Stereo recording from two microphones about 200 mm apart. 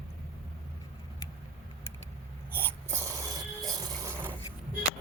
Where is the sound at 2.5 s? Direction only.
10° right (ahead or behind).